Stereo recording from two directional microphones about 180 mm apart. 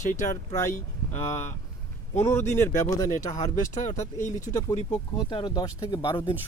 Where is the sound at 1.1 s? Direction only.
15° left (ahead or behind).